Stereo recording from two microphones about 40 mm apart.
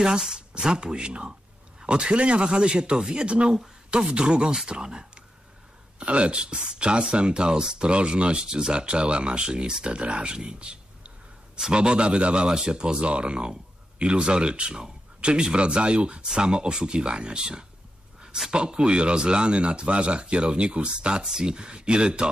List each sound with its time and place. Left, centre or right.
0.0 s speech: centre